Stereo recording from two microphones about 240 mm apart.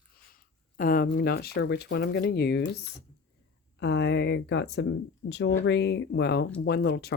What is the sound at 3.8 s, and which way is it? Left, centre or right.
Speech, left.